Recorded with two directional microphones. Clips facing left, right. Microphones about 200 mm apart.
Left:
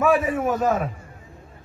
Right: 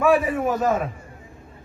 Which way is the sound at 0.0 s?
Centre (ahead or behind).